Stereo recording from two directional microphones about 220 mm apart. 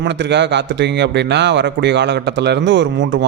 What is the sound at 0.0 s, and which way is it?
A man's voice, 55° right (ahead or behind).